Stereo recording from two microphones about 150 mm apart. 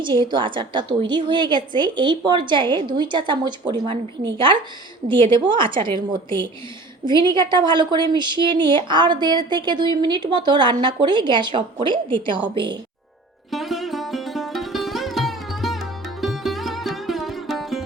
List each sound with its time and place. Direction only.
0.0 s a woman's voice: 30° right (ahead or behind)
5.0 s a woman's voice: 35° right (ahead or behind)
13.5 s sitar: centre (ahead or behind)
16.2 s music: centre (ahead or behind)